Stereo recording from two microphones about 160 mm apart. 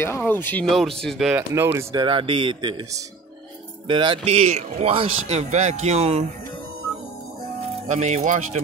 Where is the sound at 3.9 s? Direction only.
30° right (ahead or behind).